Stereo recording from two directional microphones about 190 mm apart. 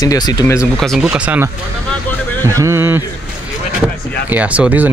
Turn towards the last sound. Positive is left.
turn(degrees=-10)  # may be behind; listen again after turning